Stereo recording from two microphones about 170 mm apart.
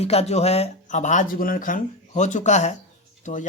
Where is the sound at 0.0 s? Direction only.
40° left (ahead or behind).